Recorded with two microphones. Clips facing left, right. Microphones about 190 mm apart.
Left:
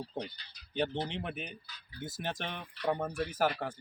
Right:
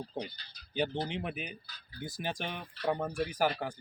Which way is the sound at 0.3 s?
45° right (ahead or behind).